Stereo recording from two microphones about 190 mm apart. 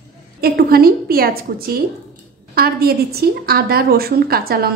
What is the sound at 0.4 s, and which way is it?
A woman's voice, 55° right (ahead or behind).